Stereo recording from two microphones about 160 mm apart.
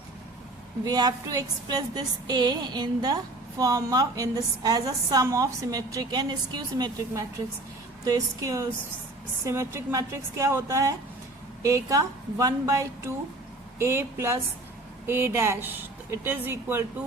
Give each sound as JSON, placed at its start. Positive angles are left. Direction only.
{"t": 0.9, "sound": "a woman's voice", "side_deg": -25}